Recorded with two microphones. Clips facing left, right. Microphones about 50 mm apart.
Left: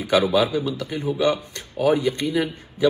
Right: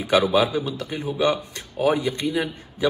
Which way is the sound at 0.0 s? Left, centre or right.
Right.